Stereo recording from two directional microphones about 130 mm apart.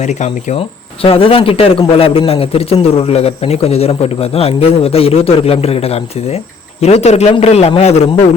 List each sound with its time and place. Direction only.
0.0 s a man's voice: 65° left (ahead or behind)
1.0 s a man's voice: 45° left (ahead or behind)